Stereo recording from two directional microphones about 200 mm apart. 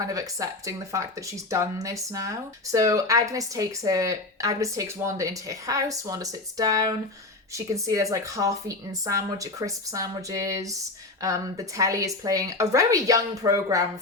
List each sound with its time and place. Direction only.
0.0 s speech: 15° right (ahead or behind)